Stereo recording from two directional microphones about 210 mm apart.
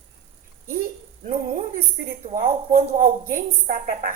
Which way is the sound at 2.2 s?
40° right (ahead or behind).